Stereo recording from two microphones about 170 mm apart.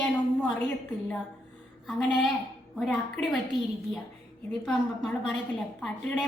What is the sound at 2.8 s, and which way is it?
Speech, centre (ahead or behind).